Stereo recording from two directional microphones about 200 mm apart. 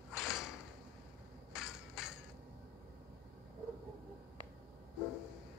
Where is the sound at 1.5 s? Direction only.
5° right (ahead or behind).